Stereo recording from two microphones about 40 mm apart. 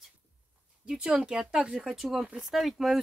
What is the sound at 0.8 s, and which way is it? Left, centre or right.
Speech, right.